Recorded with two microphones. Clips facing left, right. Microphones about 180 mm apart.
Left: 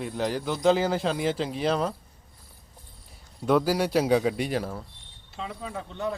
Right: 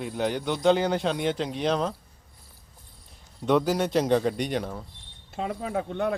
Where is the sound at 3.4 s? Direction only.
5° left (ahead or behind).